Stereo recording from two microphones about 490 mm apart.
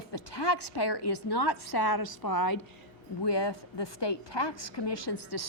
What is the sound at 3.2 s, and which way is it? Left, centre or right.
A woman's voice, left.